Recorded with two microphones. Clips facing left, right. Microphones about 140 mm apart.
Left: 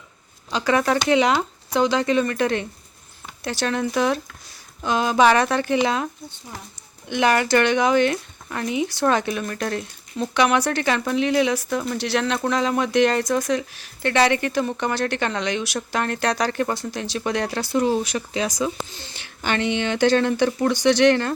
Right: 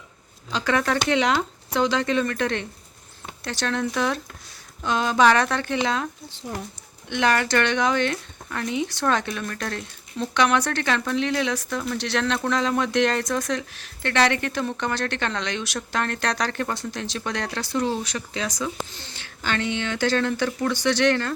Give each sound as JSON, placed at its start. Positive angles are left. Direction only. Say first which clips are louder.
{"t": 0.5, "sound": "speech", "louder": "left 3 dB", "side_deg": 5}
{"t": 7.1, "sound": "speech", "louder": "left 3 dB", "side_deg": 10}